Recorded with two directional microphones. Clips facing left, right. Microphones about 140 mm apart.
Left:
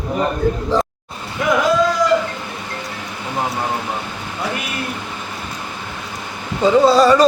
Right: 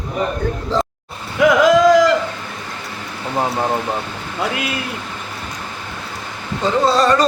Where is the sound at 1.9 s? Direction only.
90° right.